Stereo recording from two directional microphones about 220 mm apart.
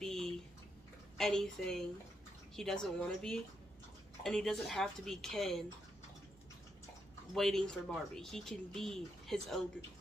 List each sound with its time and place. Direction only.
0.0 s a sound: centre (ahead or behind)
1.1 s speech: centre (ahead or behind)
7.3 s speech: centre (ahead or behind)